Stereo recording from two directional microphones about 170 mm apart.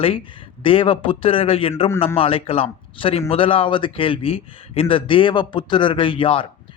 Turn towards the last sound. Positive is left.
turn(degrees=30)  # may be behind; listen again after turning